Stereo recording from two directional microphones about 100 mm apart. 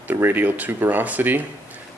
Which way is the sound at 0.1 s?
20° right (ahead or behind).